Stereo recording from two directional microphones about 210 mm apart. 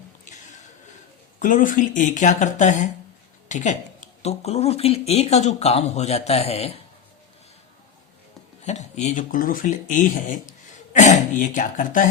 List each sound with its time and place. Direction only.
1.4 s speech: 40° left (ahead or behind)
8.6 s speech: 35° left (ahead or behind)